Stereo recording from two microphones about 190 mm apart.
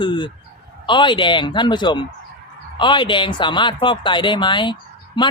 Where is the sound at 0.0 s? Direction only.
25° left (ahead or behind).